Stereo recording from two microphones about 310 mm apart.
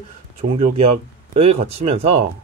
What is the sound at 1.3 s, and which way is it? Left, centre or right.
Speech, centre.